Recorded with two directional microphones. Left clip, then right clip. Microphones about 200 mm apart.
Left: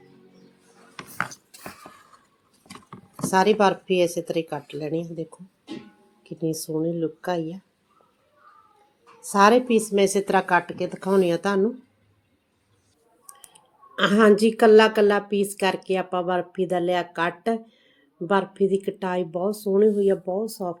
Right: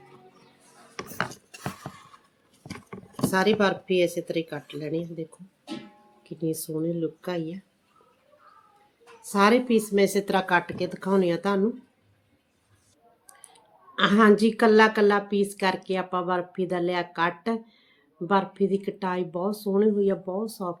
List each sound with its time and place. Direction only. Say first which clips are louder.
3.3 s speech: left 4 dB; 15° left (ahead or behind)
6.2 s speech: left 2 dB; 15° left (ahead or behind)
9.2 s speech: left 4 dB; 15° left (ahead or behind)
13.9 s speech: left 2 dB; 15° left (ahead or behind)